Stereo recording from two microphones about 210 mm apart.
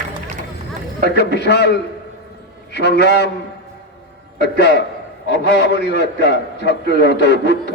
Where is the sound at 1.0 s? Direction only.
50° left (ahead or behind).